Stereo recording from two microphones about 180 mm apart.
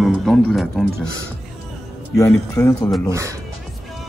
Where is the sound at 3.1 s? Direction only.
15° right (ahead or behind).